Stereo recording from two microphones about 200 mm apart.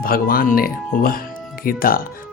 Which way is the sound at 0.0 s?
45° left (ahead or behind).